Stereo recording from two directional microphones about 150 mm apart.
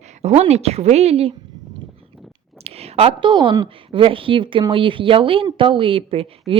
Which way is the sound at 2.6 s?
45° right (ahead or behind).